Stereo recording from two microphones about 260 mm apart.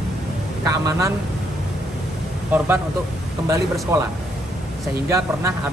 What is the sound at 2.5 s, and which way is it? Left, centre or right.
Speech, centre.